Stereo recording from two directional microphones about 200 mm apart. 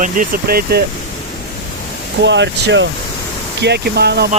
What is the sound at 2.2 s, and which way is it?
Speech, 60° right (ahead or behind).